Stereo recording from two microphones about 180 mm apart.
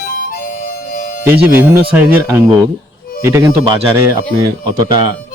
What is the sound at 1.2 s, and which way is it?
Speech, 10° right (ahead or behind).